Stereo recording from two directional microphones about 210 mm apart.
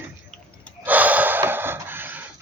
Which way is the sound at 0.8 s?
5° right (ahead or behind).